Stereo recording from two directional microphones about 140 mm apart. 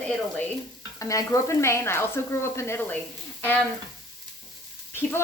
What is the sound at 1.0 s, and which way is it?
Speech, 25° left (ahead or behind).